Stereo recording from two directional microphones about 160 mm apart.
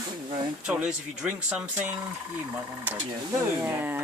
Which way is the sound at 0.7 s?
5° right (ahead or behind).